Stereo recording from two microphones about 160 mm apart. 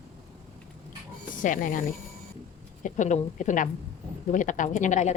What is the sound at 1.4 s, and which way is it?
Speech, 55° left (ahead or behind).